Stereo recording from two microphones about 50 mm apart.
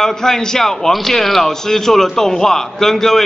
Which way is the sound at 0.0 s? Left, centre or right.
Centre.